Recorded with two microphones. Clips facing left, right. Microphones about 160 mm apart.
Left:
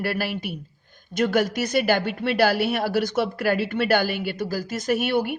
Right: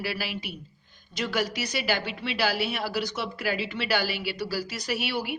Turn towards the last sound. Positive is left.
turn(degrees=50)  # may be behind; listen again after turning